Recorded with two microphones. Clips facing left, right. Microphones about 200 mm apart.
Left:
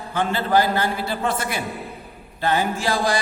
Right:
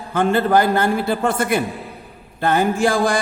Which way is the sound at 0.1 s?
50° right (ahead or behind).